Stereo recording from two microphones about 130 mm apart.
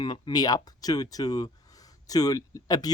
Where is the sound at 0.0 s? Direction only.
35° left (ahead or behind).